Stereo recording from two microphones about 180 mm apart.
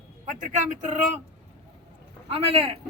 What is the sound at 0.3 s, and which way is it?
Speech, 45° right (ahead or behind).